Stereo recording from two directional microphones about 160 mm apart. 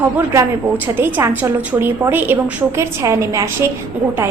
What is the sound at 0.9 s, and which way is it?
A woman's voice, 15° right (ahead or behind).